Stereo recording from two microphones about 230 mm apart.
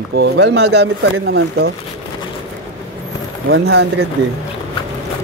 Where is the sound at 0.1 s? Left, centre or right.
Right.